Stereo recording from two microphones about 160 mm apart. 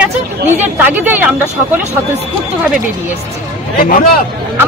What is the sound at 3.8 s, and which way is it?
Speech, 65° left (ahead or behind).